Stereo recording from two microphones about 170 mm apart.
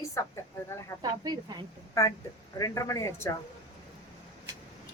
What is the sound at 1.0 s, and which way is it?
Speech, 25° right (ahead or behind).